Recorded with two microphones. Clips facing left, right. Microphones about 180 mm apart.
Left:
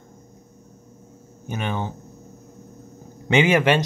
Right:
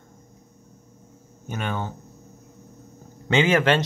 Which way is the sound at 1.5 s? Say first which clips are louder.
Left 2 dB; 15° left (ahead or behind).